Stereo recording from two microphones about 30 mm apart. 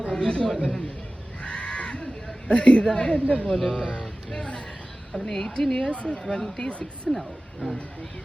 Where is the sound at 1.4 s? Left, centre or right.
Left.